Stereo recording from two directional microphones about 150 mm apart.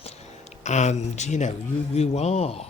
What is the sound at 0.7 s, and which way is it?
Speech, 50° left (ahead or behind).